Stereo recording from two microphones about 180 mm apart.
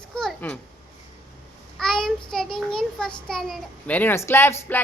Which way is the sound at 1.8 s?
5° left (ahead or behind).